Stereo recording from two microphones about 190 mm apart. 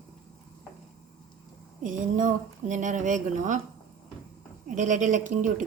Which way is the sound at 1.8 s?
45° right (ahead or behind).